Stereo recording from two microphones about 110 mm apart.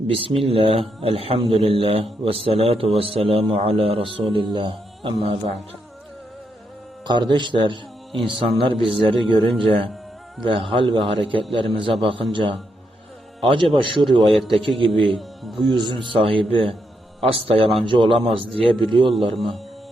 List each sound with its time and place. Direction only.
0.1 s a man's voice: 55° right (ahead or behind)
7.0 s a man's voice: 45° right (ahead or behind)
14.3 s speech: centre (ahead or behind)
14.8 s a man's voice: 50° right (ahead or behind)
15.0 s speech: centre (ahead or behind)
15.6 s a man's voice: 45° right (ahead or behind)
17.8 s a man's voice: 50° right (ahead or behind)
19.3 s speech: centre (ahead or behind)